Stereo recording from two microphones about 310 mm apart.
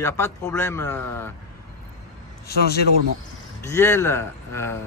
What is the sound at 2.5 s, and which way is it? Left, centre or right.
Speech, left.